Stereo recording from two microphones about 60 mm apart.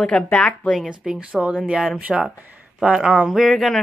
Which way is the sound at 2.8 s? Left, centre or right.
Centre.